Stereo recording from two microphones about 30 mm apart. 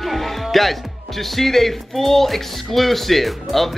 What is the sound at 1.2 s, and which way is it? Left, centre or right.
Speech, centre.